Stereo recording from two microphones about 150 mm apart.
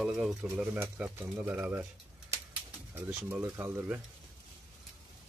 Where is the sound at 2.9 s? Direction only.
15° right (ahead or behind).